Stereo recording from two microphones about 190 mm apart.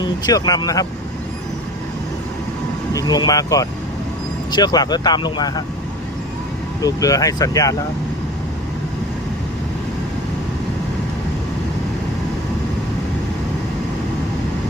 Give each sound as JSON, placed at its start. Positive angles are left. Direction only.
{"t": 0.0, "sound": "speech", "side_deg": 20}
{"t": 2.9, "sound": "speech", "side_deg": 20}
{"t": 6.8, "sound": "speech", "side_deg": 20}